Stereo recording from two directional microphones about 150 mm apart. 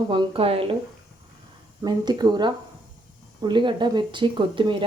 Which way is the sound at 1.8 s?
25° right (ahead or behind).